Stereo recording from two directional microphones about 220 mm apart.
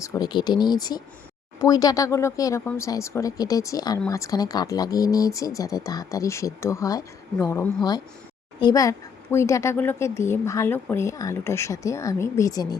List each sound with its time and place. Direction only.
0.0 s a woman's voice: 15° left (ahead or behind)